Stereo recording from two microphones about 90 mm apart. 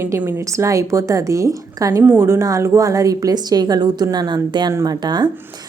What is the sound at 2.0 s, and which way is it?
A woman's voice, 25° right (ahead or behind).